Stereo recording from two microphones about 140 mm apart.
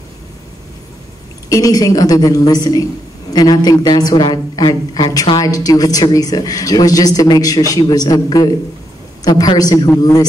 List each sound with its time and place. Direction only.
1.5 s speech: 25° left (ahead or behind)